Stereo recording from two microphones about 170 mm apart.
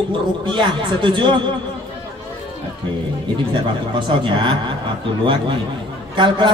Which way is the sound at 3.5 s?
30° right (ahead or behind).